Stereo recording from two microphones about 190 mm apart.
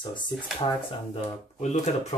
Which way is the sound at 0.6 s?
30° left (ahead or behind).